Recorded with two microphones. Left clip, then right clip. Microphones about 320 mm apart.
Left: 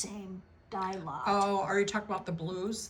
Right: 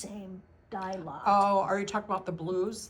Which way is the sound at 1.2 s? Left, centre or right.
Centre.